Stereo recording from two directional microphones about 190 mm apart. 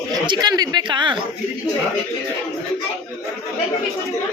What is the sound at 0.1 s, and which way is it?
Speech, 20° right (ahead or behind).